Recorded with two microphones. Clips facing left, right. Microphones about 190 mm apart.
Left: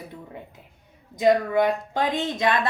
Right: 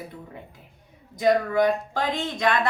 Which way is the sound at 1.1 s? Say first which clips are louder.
Left 1 dB; 20° left (ahead or behind).